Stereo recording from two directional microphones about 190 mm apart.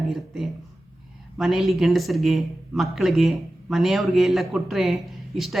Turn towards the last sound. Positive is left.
turn(degrees=0)  # may be behind; listen again after turning